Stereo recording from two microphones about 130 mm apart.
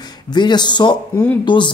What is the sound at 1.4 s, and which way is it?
Speech, 35° left (ahead or behind).